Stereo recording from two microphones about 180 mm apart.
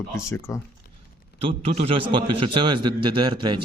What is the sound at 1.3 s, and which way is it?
A man's voice, 30° right (ahead or behind).